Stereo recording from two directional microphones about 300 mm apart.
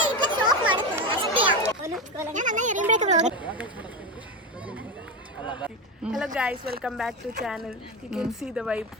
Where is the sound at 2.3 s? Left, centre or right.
Right.